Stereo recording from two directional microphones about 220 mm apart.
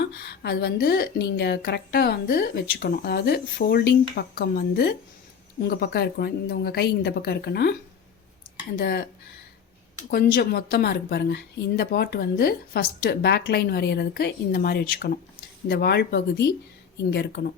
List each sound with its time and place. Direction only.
0.0 s speech: 45° left (ahead or behind)
8.8 s speech: 45° left (ahead or behind)
10.1 s speech: 45° left (ahead or behind)